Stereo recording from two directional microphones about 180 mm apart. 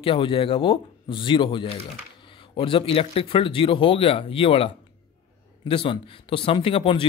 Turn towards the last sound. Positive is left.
turn(degrees=30)  # may be behind; listen again after turning